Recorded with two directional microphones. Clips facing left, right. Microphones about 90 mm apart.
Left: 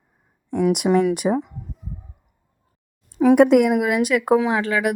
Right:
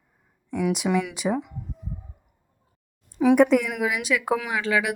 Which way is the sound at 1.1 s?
55° left (ahead or behind).